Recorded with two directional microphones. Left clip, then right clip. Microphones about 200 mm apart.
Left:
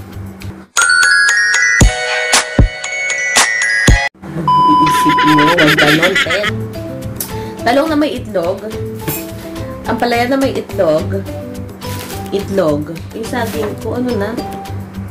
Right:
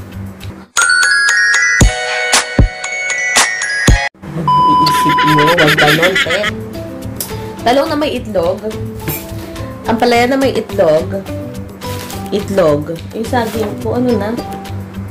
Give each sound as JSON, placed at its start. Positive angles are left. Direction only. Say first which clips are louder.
{"t": 0.7, "sound": "music", "louder": "left 1 dB", "side_deg": 0}
{"t": 7.6, "sound": "speech", "louder": "even", "side_deg": -10}
{"t": 9.8, "sound": "speech", "louder": "right 3 dB", "side_deg": -30}
{"t": 12.3, "sound": "speech", "louder": "right 3 dB", "side_deg": -35}